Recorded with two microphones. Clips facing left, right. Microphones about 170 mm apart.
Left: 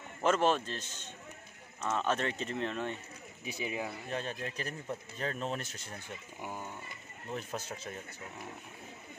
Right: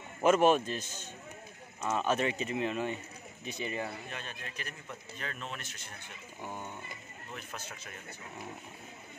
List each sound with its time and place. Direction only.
0.2 s speech: 15° right (ahead or behind)
3.4 s speech: 5° left (ahead or behind)
4.1 s speech: 35° left (ahead or behind)
6.4 s a sound: 5° left (ahead or behind)
7.3 s speech: 35° left (ahead or behind)